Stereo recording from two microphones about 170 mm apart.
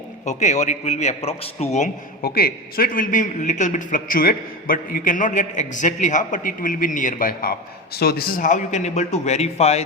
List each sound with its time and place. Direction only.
0.3 s a man's voice: 45° left (ahead or behind)
2.2 s a man's voice: 60° left (ahead or behind); by 9.8 s 40° left (ahead or behind)